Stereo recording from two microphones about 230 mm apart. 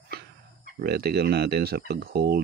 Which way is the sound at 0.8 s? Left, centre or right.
Right.